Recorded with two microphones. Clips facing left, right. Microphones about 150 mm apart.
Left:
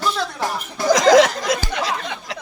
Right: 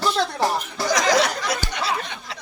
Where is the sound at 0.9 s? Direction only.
90° left.